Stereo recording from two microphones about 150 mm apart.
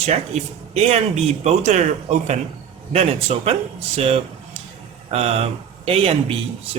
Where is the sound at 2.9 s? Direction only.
40° right (ahead or behind).